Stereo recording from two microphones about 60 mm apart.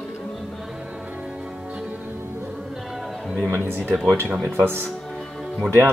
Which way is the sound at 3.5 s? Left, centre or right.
Right.